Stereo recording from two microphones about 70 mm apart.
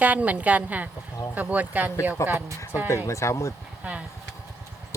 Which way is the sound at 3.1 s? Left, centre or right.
Left.